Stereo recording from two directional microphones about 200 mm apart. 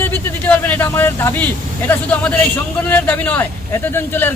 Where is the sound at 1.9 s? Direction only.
10° left (ahead or behind).